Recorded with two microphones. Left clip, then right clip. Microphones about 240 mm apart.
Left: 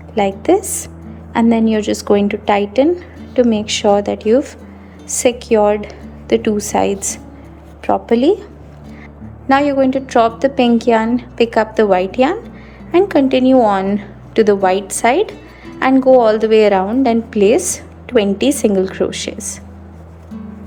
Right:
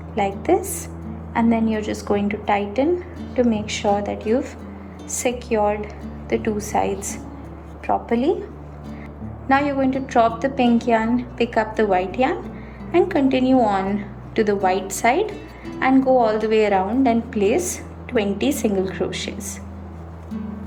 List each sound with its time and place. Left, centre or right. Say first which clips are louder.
0.1 s a woman's voice: left 6 dB; left
9.5 s a woman's voice: left 6 dB; left